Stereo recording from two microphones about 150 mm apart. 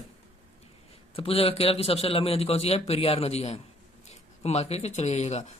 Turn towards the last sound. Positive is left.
turn(degrees=50)  # may be behind; listen again after turning